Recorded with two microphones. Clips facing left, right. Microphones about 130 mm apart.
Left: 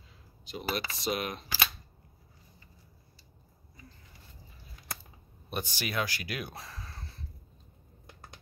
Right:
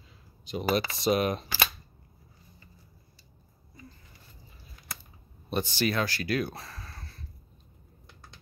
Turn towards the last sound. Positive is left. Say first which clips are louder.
# right 1 dB
turn(degrees=15)  # may be behind; listen again after turning